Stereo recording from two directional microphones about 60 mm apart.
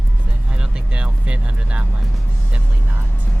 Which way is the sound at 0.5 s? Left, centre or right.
Centre.